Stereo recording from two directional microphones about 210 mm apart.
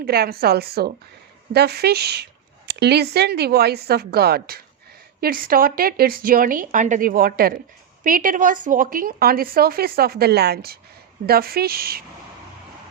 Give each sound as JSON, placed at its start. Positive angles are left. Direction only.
{"t": 0.0, "sound": "a woman's voice", "side_deg": -50}